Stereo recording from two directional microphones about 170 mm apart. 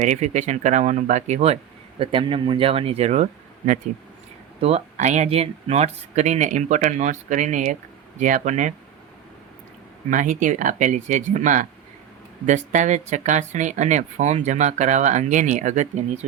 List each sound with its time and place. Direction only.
0.0 s speech: 45° right (ahead or behind)
4.6 s speech: 40° right (ahead or behind)
10.1 s speech: 50° right (ahead or behind)